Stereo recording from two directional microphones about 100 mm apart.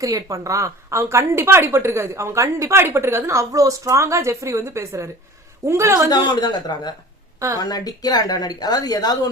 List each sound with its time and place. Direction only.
0.0 s speech: 35° right (ahead or behind)
6.2 s a woman's voice: 45° left (ahead or behind)
7.3 s a woman's voice: 30° right (ahead or behind)
7.6 s a woman's voice: 40° left (ahead or behind)